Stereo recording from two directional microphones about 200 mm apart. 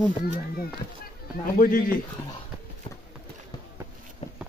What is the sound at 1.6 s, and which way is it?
Speech, 45° left (ahead or behind).